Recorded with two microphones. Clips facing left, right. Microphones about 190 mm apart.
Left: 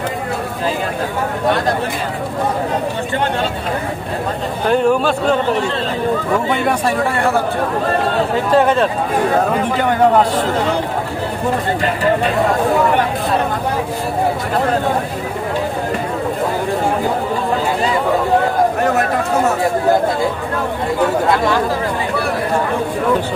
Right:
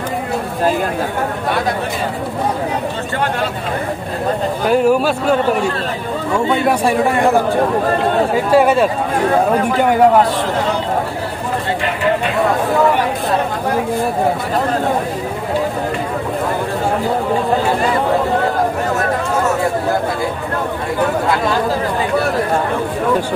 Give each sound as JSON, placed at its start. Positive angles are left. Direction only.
{"t": 4.6, "sound": "a man's voice", "side_deg": -5}
{"t": 6.9, "sound": "a man's voice", "side_deg": -15}
{"t": 8.5, "sound": "a man's voice", "side_deg": -10}